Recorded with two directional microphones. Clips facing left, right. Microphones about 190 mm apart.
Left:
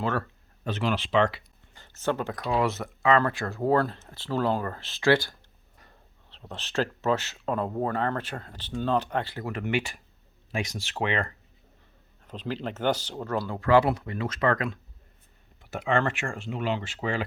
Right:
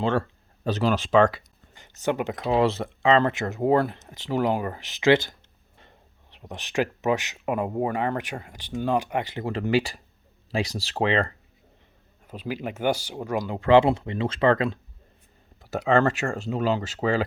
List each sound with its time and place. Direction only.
0.0 s speech: 30° right (ahead or behind); by 1.4 s 45° right (ahead or behind)
1.7 s speech: 15° right (ahead or behind); by 11.3 s 30° right (ahead or behind)
12.3 s speech: 10° right (ahead or behind); by 17.2 s 40° right (ahead or behind)